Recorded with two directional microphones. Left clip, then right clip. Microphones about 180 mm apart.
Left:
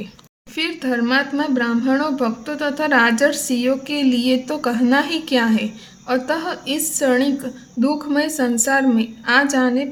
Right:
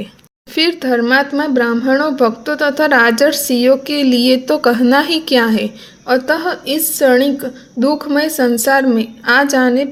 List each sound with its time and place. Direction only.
0.5 s a woman's voice: 30° right (ahead or behind)